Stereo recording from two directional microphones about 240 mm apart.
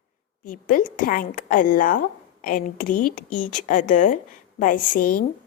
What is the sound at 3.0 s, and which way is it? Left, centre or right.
Speech, left.